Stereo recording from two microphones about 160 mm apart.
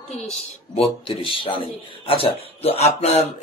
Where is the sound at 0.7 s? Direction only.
35° left (ahead or behind).